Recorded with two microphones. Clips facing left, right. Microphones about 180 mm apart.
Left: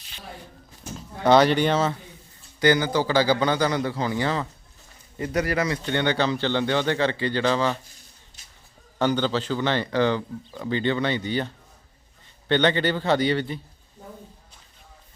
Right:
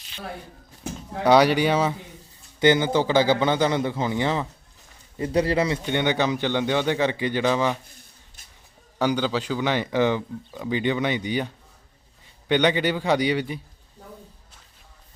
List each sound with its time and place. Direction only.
1.2 s speech: 10° right (ahead or behind)
2.6 s a man's voice: 20° right (ahead or behind)
8.4 s chicken: 55° right (ahead or behind)
9.0 s speech: 10° right (ahead or behind)